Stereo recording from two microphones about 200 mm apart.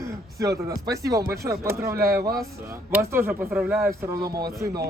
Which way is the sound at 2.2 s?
50° right (ahead or behind).